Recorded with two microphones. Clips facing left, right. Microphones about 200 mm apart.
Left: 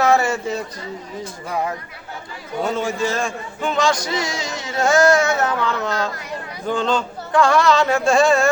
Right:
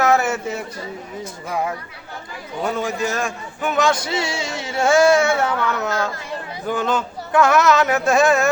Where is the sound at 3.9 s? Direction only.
25° right (ahead or behind).